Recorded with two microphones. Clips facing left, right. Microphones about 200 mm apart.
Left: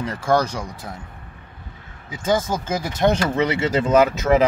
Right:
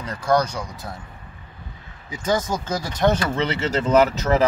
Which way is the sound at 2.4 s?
10° left (ahead or behind).